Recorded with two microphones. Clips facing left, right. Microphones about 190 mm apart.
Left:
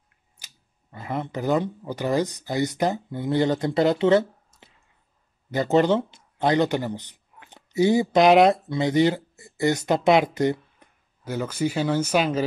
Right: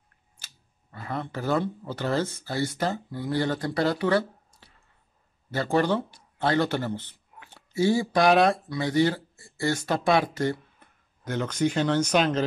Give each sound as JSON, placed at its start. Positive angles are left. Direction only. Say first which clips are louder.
{"t": 0.4, "sound": "a sound", "louder": "even", "side_deg": 10}
{"t": 0.9, "sound": "speech", "louder": "left 3 dB", "side_deg": 20}
{"t": 11.2, "sound": "speech", "louder": "even", "side_deg": 5}